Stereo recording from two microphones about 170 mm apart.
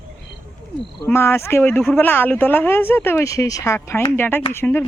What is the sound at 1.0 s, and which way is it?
Speech, 15° left (ahead or behind).